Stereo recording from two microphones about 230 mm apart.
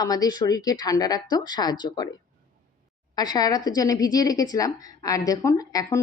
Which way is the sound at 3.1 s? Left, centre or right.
Centre.